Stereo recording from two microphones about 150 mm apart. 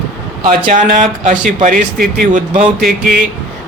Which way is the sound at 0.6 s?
55° right (ahead or behind).